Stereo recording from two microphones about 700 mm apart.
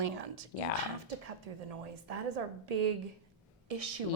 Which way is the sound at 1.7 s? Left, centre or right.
Right.